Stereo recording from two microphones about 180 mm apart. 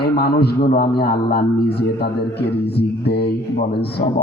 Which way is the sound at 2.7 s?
65° left (ahead or behind).